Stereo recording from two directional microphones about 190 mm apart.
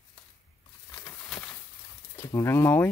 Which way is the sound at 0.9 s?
10° left (ahead or behind).